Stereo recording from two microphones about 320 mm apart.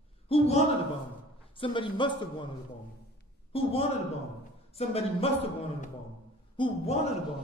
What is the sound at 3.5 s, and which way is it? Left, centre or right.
Speech, centre.